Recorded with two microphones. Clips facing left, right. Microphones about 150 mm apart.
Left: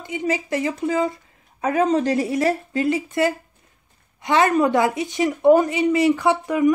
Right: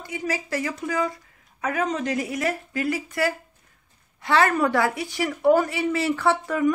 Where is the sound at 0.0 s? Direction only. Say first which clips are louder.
Left 5 dB; 20° left (ahead or behind).